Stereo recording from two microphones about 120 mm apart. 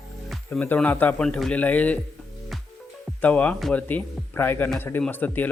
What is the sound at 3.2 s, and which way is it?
Speech, 10° left (ahead or behind).